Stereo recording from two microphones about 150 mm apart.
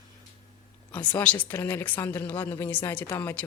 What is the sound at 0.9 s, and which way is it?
Speech, 10° left (ahead or behind).